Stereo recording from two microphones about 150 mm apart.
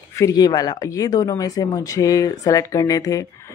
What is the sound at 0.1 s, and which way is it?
Speech, 20° left (ahead or behind).